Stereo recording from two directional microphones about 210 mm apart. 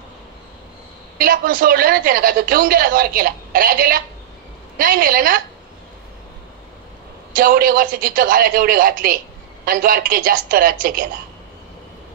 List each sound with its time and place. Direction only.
1.1 s a woman's voice: 40° right (ahead or behind)
7.3 s a woman's voice: 40° right (ahead or behind)